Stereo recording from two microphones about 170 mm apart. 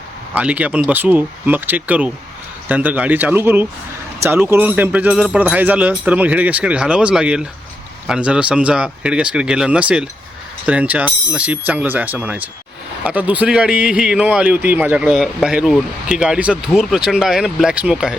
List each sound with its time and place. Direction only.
0.3 s a man's voice: 10° right (ahead or behind)